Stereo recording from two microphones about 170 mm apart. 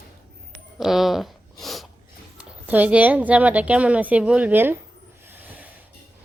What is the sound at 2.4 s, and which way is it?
A woman's voice, 10° right (ahead or behind).